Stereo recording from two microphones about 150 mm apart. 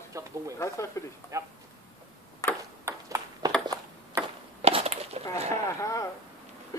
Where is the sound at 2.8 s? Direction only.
20° right (ahead or behind).